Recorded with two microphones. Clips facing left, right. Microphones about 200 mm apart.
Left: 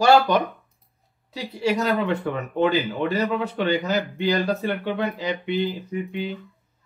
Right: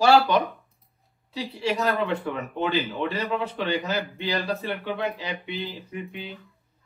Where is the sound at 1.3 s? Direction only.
45° left (ahead or behind).